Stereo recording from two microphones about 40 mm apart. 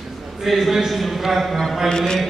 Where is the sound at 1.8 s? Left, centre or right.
Centre.